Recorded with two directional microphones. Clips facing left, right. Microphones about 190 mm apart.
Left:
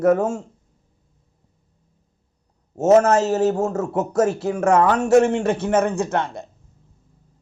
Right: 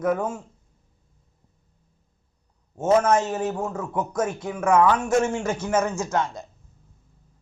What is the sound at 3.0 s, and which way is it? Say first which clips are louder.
Speech: left 5 dB; 75° left (ahead or behind).